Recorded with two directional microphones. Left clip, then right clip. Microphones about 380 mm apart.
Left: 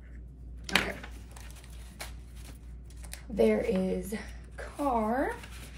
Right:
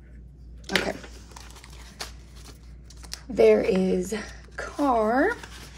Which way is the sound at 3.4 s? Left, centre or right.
Right.